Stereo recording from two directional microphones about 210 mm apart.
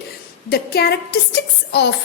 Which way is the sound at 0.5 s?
50° left (ahead or behind).